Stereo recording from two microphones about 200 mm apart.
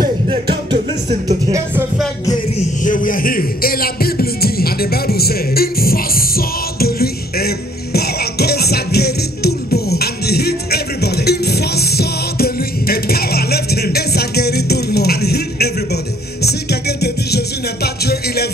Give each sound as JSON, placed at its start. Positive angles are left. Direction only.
{"t": 0.3, "sound": "music", "side_deg": -25}
{"t": 2.8, "sound": "music", "side_deg": 40}